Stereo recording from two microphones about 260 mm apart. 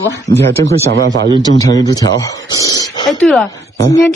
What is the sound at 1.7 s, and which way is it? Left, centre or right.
A man's voice, centre.